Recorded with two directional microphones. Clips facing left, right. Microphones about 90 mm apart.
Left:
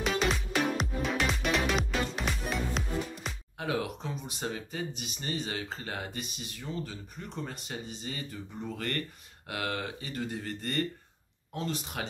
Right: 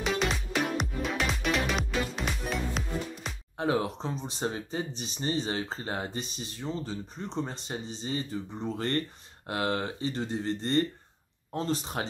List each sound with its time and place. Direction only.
0.0 s music: centre (ahead or behind)
3.5 s speech: 30° right (ahead or behind)